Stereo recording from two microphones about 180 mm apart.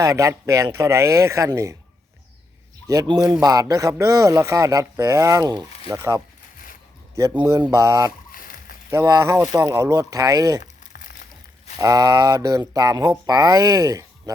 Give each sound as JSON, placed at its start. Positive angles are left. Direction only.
{"t": 0.0, "sound": "speech", "side_deg": -15}
{"t": 2.8, "sound": "speech", "side_deg": -20}
{"t": 7.2, "sound": "speech", "side_deg": -20}
{"t": 8.3, "sound": "a sound", "side_deg": 50}
{"t": 8.9, "sound": "speech", "side_deg": -15}
{"t": 10.6, "sound": "crumpling", "side_deg": 45}
{"t": 11.8, "sound": "speech", "side_deg": -20}